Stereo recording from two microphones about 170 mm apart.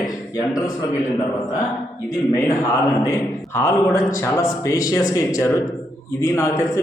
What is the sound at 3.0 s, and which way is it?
A man's voice, 15° left (ahead or behind).